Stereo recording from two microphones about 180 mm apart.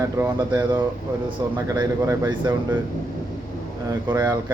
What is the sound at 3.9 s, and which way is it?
Speech, 20° right (ahead or behind).